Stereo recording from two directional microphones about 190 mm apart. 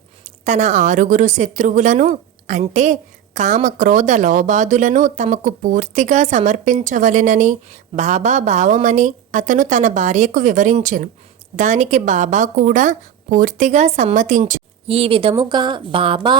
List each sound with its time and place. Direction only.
0.4 s a woman's voice: 35° right (ahead or behind)
14.8 s a woman's voice: 30° right (ahead or behind)